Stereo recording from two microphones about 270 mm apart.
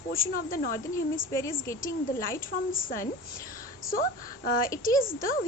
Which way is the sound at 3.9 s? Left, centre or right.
Left.